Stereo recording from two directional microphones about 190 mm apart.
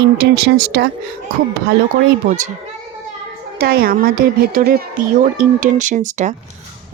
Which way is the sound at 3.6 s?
50° right (ahead or behind).